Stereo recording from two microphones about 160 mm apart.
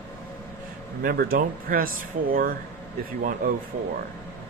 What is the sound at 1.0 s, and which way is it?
Speech, 70° right (ahead or behind).